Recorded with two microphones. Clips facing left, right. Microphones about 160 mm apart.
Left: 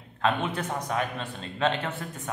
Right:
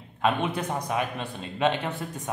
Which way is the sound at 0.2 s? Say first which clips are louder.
Right 1 dB; 15° right (ahead or behind).